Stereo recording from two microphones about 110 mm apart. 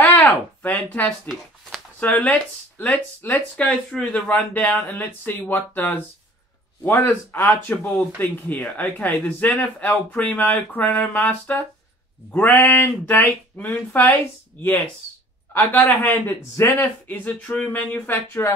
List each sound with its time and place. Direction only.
0.3 s speech: 15° left (ahead or behind)
18.1 s speech: 30° left (ahead or behind)